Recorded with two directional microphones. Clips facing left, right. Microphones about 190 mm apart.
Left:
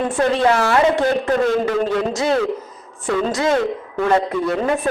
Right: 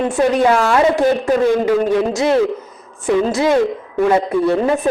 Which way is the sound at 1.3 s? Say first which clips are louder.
Right 3 dB; 10° right (ahead or behind).